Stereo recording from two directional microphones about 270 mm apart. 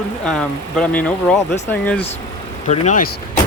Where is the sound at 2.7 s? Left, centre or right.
Left.